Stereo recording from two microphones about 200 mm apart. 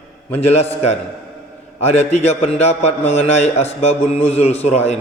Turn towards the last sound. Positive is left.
turn(degrees=30)  # may be behind; listen again after turning